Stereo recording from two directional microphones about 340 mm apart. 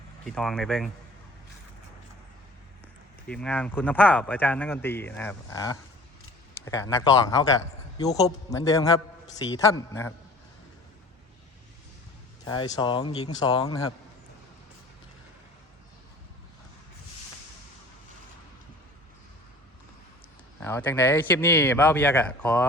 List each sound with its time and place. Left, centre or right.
0.3 s speech: centre
3.2 s a man's voice: centre
12.5 s a man's voice: centre
20.6 s speech: centre